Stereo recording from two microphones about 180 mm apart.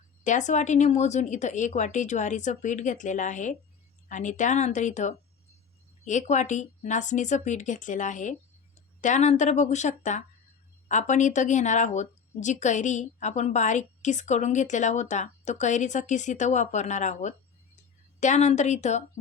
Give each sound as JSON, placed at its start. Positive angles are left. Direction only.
{"t": 0.3, "sound": "speech", "side_deg": 40}